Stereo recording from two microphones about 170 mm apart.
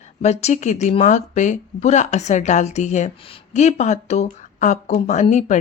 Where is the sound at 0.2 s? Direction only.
40° left (ahead or behind).